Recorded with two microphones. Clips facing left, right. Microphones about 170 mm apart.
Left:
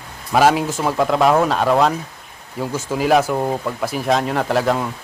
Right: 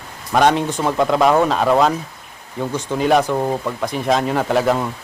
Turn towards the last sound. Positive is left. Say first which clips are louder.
# right 1 dB
turn(degrees=0)  # may be behind; listen again after turning